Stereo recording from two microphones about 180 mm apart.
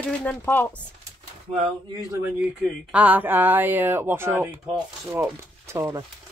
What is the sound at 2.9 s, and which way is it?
Speech, 10° right (ahead or behind).